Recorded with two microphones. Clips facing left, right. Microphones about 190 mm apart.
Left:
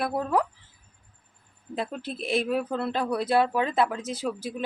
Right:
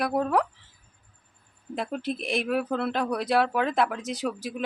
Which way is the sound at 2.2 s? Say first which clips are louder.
Left 2 dB; centre (ahead or behind).